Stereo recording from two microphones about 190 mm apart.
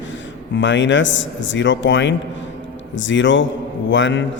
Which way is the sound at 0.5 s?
75° left (ahead or behind).